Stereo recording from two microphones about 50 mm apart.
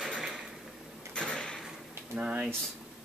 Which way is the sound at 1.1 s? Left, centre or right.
Centre.